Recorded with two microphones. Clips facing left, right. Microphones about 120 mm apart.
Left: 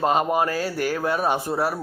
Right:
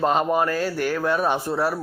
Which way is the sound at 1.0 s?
10° left (ahead or behind).